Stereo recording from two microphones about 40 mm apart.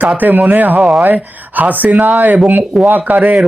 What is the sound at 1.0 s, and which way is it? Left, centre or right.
Speech, right.